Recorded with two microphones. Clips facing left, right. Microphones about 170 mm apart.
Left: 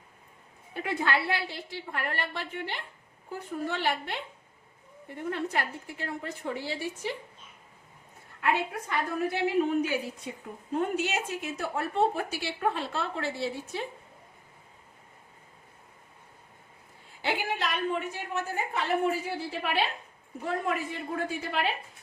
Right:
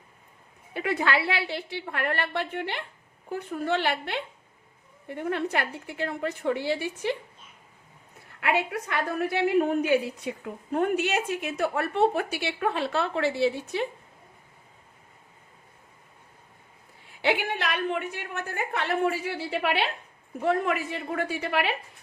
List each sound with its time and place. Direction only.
0.7 s a woman's voice: 70° right (ahead or behind)
8.4 s a woman's voice: 75° right (ahead or behind)
17.2 s a woman's voice: 65° right (ahead or behind)